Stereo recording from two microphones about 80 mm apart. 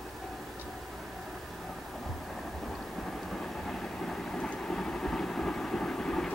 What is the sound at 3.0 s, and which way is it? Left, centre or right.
Vehicle, centre.